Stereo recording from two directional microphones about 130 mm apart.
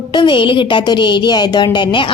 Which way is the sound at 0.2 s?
40° left (ahead or behind).